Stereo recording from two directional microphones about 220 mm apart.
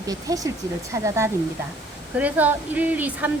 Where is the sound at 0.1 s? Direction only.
15° right (ahead or behind).